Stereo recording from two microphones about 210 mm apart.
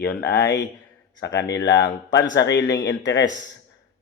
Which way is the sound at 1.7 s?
55° left (ahead or behind).